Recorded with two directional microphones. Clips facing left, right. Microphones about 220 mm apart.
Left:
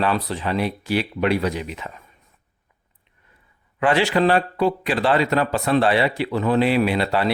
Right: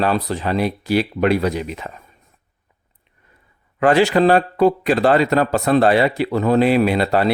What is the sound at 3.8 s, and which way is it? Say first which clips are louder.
Speech: right 4 dB; 40° right (ahead or behind).